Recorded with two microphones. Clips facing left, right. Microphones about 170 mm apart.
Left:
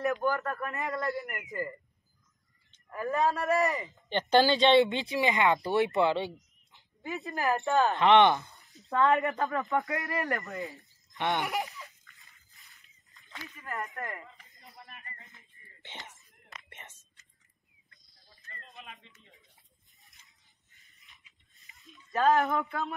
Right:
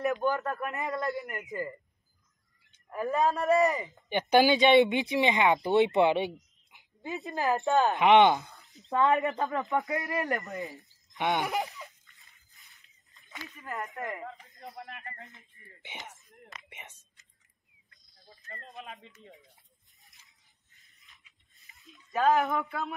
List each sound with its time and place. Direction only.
0.0 s speech: 20° right (ahead or behind)
2.9 s speech: 20° right (ahead or behind)
11.1 s laughter: 15° right (ahead or behind)
12.5 s a sound: centre (ahead or behind)
13.3 s speech: 15° right (ahead or behind)
14.2 s a sound: 70° right (ahead or behind)
15.8 s speech: 15° right (ahead or behind)
16.6 s whispering: 15° right (ahead or behind)
21.8 s speech: 5° right (ahead or behind)